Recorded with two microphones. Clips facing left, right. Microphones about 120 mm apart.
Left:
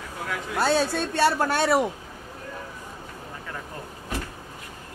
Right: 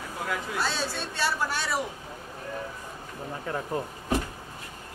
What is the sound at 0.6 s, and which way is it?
A woman's voice, 50° left (ahead or behind).